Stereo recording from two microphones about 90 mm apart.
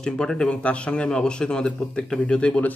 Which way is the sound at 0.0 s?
5° left (ahead or behind).